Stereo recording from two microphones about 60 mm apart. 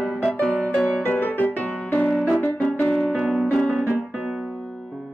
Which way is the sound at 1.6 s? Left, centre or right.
Centre.